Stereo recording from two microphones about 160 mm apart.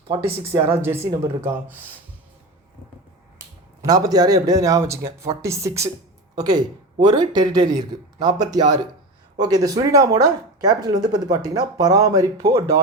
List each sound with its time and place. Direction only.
0.7 s speech: 15° right (ahead or behind)
3.8 s speech: 25° right (ahead or behind)